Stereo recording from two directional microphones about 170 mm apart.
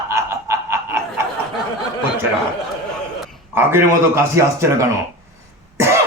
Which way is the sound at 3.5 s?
15° right (ahead or behind).